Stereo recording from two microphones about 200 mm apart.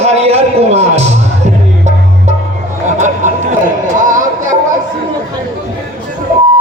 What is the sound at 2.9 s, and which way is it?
Chatter, 40° right (ahead or behind).